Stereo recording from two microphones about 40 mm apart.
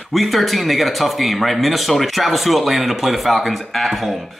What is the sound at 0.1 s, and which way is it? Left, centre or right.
Speech, centre.